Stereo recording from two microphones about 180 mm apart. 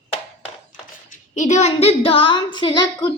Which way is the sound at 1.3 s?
40° left (ahead or behind).